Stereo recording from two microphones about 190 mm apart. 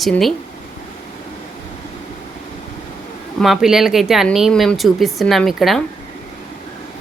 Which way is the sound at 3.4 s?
Centre (ahead or behind).